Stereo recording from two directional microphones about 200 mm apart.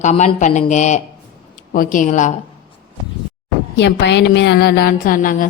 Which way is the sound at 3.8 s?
60° left (ahead or behind).